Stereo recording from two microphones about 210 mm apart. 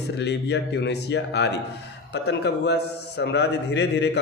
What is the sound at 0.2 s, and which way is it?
A man's voice, 55° left (ahead or behind).